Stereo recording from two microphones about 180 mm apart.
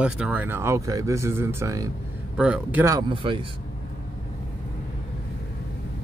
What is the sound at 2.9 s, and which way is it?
Speech, 25° right (ahead or behind).